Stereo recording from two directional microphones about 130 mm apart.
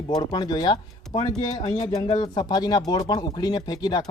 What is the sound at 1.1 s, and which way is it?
Speech, 50° left (ahead or behind).